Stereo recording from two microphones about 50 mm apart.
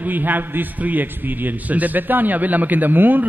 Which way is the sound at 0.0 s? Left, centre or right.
Right.